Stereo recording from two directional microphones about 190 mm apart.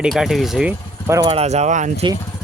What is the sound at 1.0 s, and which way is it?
Speech, 15° right (ahead or behind).